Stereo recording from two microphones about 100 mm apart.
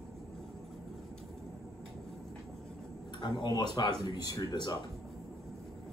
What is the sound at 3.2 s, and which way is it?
Speech, 45° left (ahead or behind).